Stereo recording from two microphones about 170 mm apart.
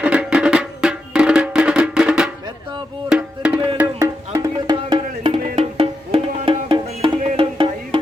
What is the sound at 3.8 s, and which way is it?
Music, 20° right (ahead or behind).